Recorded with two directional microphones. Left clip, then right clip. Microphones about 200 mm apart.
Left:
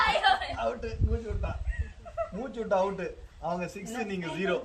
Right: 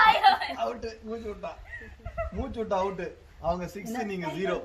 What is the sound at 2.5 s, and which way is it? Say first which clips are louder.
A man's voice: left 1 dB; 55° right (ahead or behind).